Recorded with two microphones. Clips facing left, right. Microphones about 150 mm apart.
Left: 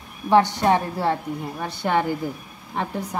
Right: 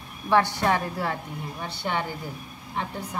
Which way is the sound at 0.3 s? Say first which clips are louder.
Left 5 dB; 20° left (ahead or behind).